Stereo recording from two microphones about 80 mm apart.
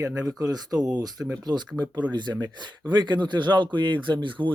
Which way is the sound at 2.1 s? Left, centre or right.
Right.